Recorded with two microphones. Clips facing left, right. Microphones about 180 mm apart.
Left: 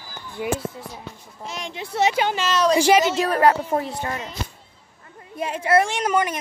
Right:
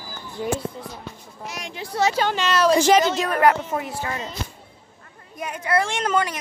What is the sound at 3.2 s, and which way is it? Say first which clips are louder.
Speech: left 1 dB; 30° left (ahead or behind).